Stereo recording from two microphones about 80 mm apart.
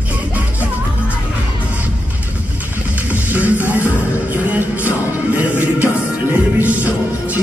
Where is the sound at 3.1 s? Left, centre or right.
Right.